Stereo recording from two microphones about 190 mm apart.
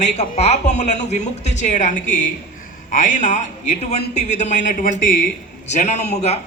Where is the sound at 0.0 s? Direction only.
35° left (ahead or behind).